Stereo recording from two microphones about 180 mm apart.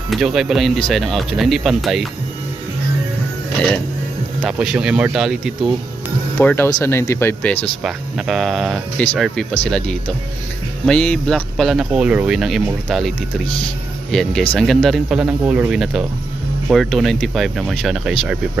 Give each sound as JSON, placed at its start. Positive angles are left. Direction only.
{"t": 0.1, "sound": "speech", "side_deg": 0}
{"t": 4.4, "sound": "speech", "side_deg": -5}
{"t": 6.4, "sound": "speech", "side_deg": 10}
{"t": 7.8, "sound": "speech", "side_deg": 0}